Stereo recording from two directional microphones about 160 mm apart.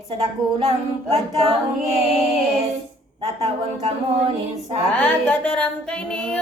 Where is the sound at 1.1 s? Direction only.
40° right (ahead or behind).